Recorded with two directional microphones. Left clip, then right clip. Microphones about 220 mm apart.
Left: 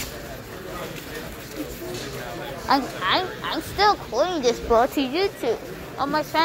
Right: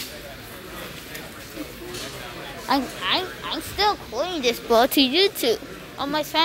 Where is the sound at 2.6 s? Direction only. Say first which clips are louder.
Left 2 dB; 25° right (ahead or behind).